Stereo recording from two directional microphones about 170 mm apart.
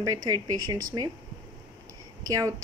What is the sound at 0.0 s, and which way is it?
Speech, 20° right (ahead or behind).